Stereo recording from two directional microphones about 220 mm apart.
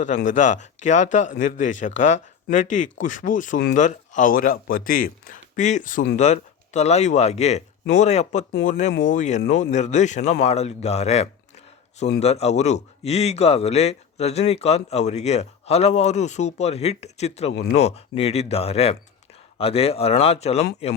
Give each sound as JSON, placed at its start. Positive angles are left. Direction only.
{"t": 0.2, "sound": "speech", "side_deg": 35}
{"t": 17.5, "sound": "speech", "side_deg": 50}
{"t": 17.7, "sound": "speech", "side_deg": 30}